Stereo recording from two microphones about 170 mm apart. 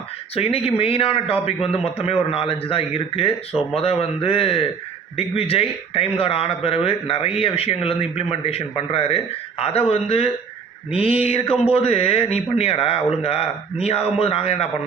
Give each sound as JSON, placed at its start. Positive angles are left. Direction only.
{"t": 0.3, "sound": "speech", "side_deg": 35}